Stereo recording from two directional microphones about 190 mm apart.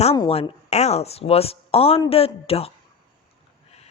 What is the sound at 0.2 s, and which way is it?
Speech, 30° left (ahead or behind).